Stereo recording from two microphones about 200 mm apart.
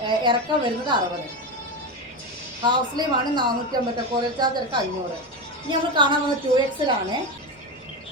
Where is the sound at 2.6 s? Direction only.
20° right (ahead or behind).